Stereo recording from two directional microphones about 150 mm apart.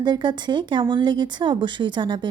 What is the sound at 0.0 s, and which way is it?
Speech, 30° right (ahead or behind).